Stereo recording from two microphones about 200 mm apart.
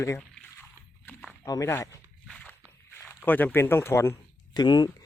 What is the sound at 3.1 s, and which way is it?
Speech, 10° left (ahead or behind).